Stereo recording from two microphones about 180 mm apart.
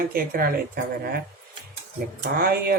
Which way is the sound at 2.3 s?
55° right (ahead or behind).